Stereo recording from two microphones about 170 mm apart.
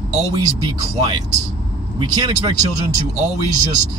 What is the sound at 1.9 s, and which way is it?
Speech, 25° right (ahead or behind).